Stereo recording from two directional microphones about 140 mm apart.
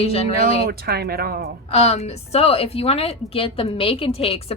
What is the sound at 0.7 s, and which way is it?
Speech, 90° right.